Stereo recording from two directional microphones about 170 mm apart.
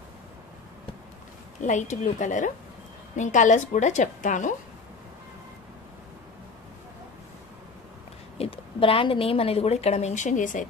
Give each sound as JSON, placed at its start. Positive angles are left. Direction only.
{"t": 1.6, "sound": "a woman's voice", "side_deg": 45}
{"t": 8.4, "sound": "a woman's voice", "side_deg": 35}